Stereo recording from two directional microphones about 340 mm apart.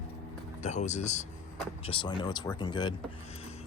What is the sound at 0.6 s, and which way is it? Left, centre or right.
Speech, centre.